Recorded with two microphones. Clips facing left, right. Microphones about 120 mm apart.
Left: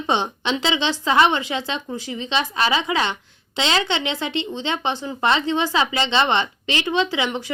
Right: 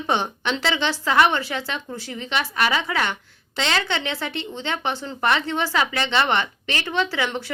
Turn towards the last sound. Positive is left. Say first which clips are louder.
# left 2 dB
turn(degrees=15)  # may be behind; listen again after turning